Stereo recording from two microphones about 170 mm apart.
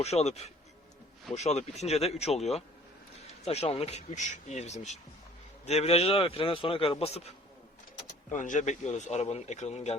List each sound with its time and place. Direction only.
0.0 s a man's voice: 40° left (ahead or behind)
8.3 s speech: 45° left (ahead or behind)